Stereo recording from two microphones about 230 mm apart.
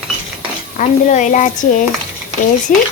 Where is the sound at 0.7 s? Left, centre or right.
Left.